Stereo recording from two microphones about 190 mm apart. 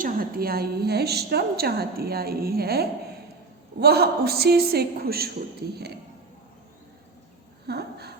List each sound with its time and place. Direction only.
0.0 s a woman's voice: 50° right (ahead or behind)
7.7 s speech: 60° right (ahead or behind)